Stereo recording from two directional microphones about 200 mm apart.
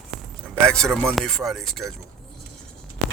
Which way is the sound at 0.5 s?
5° left (ahead or behind).